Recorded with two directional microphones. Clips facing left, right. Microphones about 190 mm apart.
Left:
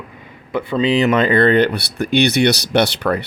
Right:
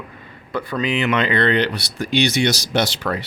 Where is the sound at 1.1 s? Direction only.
45° left (ahead or behind).